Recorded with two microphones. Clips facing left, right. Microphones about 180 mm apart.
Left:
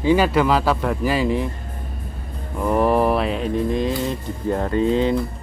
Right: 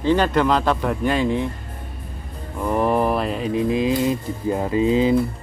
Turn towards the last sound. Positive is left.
turn(degrees=-5)  # may be behind; listen again after turning